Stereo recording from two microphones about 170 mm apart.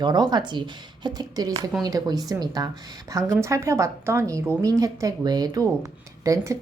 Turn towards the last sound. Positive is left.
turn(degrees=-20)  # may be behind; listen again after turning